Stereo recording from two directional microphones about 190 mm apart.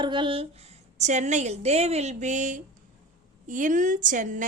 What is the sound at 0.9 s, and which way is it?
A woman's voice, 40° right (ahead or behind).